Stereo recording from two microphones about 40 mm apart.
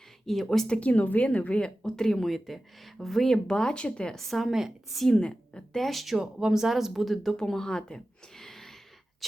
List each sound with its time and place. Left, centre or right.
0.3 s speech: centre
0.7 s speech: left
4.1 s a woman's voice: centre
6.4 s speech: centre
7.3 s a sound: centre